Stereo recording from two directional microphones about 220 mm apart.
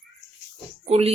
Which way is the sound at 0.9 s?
30° right (ahead or behind).